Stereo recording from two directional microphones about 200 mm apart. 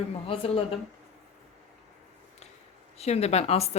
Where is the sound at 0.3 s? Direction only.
30° left (ahead or behind).